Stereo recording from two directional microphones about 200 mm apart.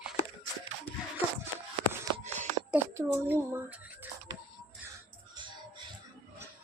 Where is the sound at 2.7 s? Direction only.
10° right (ahead or behind).